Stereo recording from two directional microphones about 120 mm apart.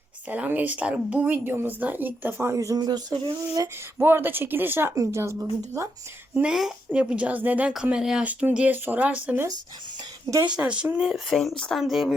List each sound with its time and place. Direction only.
0.3 s a woman's voice: 15° right (ahead or behind); by 3.6 s 40° right (ahead or behind)
3.6 s speech: 20° right (ahead or behind)
6.3 s a woman's voice: 5° right (ahead or behind)
11.3 s speech: 5° left (ahead or behind)